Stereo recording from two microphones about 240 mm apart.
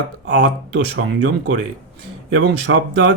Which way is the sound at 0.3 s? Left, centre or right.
Right.